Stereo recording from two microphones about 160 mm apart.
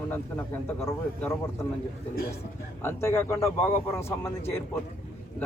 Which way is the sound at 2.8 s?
15° left (ahead or behind).